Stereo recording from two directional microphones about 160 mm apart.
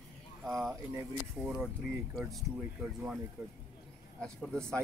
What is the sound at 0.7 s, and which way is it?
Speech, 20° right (ahead or behind).